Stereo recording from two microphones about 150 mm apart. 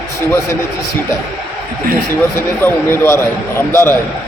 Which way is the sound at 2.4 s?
15° left (ahead or behind).